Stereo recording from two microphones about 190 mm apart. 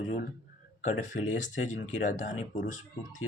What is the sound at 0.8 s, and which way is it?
Speech, 40° left (ahead or behind).